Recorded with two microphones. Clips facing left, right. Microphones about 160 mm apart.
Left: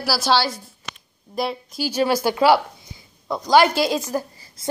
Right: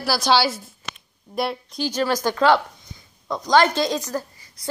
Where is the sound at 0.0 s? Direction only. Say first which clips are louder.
Right 1 dB; 5° left (ahead or behind).